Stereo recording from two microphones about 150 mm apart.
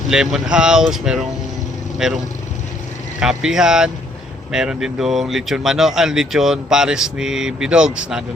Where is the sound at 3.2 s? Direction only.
5° right (ahead or behind).